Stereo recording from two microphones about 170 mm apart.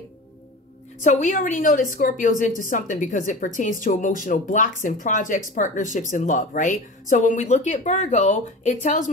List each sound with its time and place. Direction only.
1.0 s speech: 45° left (ahead or behind)